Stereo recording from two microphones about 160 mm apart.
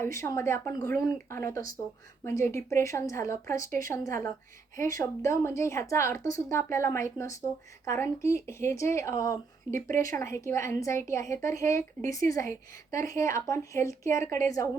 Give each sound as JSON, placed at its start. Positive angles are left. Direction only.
{"t": 0.0, "sound": "a woman's voice", "side_deg": 20}